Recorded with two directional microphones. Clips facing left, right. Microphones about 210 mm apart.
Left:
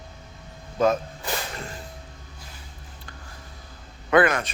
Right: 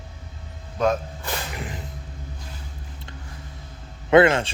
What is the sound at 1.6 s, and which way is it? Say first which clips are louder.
Music: right 3 dB; 15° right (ahead or behind).